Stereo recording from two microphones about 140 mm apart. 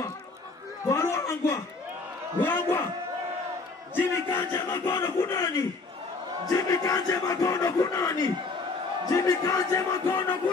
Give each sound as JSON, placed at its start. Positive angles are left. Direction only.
{"t": 0.8, "sound": "a sound", "side_deg": 20}
{"t": 2.4, "sound": "battle cry", "side_deg": 15}
{"t": 3.9, "sound": "battle cry", "side_deg": 15}
{"t": 6.5, "sound": "speech", "side_deg": 25}